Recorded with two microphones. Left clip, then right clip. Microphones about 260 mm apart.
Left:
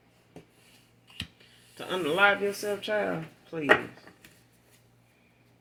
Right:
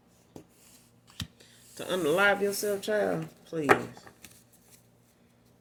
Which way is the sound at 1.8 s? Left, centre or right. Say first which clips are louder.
Left 1 dB; right.